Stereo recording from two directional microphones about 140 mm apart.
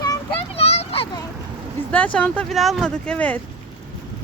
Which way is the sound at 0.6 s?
45° left (ahead or behind).